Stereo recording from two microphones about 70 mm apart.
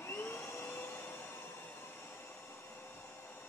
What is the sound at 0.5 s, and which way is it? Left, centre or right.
Train, left.